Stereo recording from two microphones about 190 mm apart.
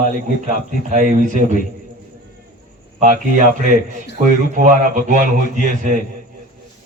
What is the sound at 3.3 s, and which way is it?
A man's voice, 40° right (ahead or behind).